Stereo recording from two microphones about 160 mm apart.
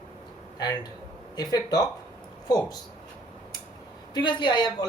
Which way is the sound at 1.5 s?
25° left (ahead or behind).